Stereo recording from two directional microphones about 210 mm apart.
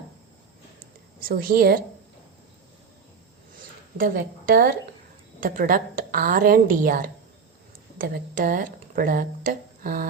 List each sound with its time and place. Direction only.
1.2 s a woman's voice: 45° right (ahead or behind)
3.9 s a woman's voice: 45° right (ahead or behind)